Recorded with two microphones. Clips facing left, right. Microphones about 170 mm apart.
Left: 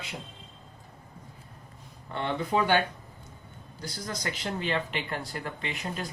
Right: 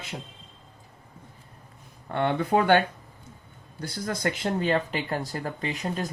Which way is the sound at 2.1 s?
60° right (ahead or behind).